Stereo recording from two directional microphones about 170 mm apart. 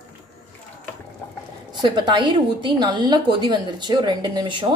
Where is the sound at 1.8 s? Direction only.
25° right (ahead or behind).